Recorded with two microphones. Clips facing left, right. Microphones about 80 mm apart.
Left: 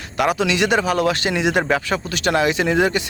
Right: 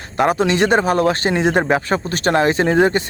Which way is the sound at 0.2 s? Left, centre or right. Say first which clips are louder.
Right 3 dB; right.